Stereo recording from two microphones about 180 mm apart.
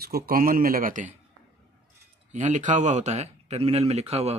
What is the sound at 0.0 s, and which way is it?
Speech, 55° right (ahead or behind).